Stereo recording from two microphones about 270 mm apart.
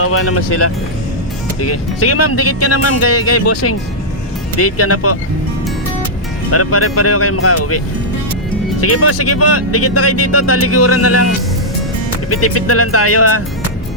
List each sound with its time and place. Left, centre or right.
0.0 s speech: left
6.5 s speech: left
8.8 s speech: left
12.3 s speech: left